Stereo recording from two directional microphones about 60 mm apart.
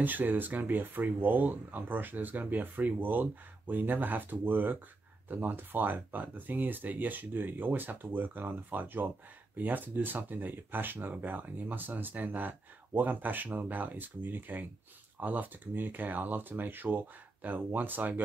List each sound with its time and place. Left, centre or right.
0.0 s speech: right